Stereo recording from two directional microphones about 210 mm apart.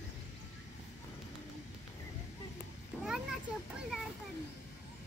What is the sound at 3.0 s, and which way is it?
Children playing, 5° right (ahead or behind).